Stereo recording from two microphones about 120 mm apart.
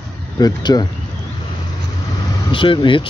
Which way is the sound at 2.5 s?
45° left (ahead or behind).